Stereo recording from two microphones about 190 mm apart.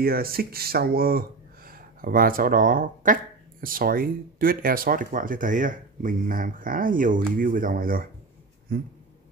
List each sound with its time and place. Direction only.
0.0 s speech: 50° right (ahead or behind)